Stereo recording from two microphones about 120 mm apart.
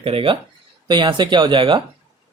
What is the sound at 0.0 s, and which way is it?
Speech, 50° right (ahead or behind).